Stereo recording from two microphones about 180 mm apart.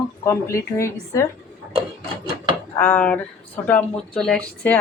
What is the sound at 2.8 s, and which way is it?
Speech, 10° left (ahead or behind).